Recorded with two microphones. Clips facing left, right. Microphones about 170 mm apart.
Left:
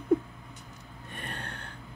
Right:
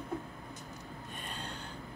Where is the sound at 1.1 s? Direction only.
65° left (ahead or behind).